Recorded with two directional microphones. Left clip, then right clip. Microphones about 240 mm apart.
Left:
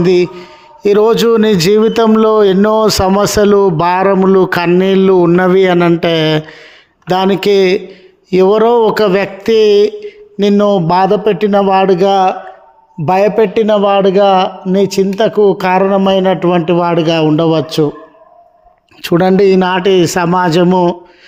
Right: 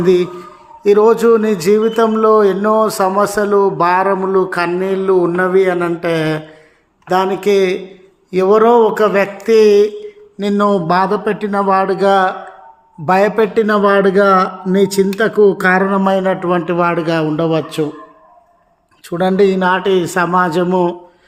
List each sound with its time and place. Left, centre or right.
0.0 s a man's voice: left
19.0 s a man's voice: left